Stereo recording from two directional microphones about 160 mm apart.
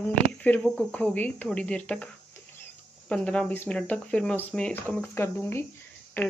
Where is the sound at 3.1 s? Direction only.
5° left (ahead or behind).